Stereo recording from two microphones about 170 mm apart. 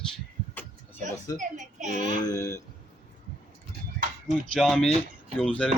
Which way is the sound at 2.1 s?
20° left (ahead or behind).